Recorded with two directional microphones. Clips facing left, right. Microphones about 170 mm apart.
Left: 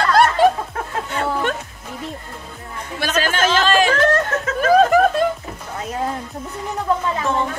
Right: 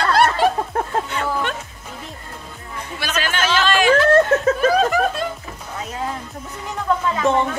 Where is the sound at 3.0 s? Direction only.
40° left (ahead or behind).